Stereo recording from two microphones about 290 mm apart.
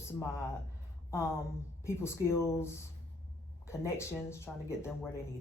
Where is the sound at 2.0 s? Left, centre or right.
Centre.